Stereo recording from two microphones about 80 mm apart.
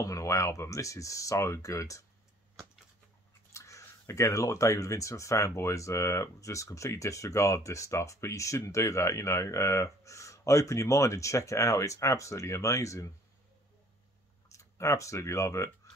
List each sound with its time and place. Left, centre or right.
0.0 s speech: left
3.5 s speech: left
14.5 s speech: left